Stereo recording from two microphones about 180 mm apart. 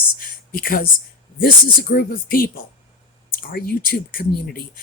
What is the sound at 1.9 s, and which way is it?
Speech, 55° left (ahead or behind).